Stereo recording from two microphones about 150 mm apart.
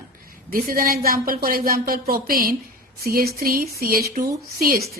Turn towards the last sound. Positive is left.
turn(degrees=-75)  # may be behind; listen again after turning